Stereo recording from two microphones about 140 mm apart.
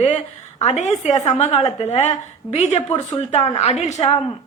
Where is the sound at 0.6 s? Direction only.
55° left (ahead or behind).